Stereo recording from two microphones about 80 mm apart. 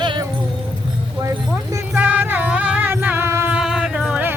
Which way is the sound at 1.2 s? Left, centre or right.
Right.